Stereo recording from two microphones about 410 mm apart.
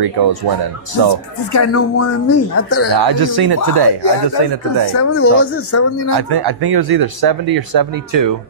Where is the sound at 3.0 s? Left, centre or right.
Right.